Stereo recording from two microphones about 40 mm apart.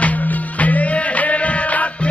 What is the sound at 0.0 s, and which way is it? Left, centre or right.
Music, left.